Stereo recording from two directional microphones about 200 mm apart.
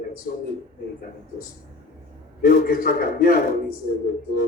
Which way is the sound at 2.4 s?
45° left (ahead or behind).